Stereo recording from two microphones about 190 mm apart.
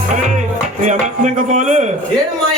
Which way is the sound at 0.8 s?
40° right (ahead or behind).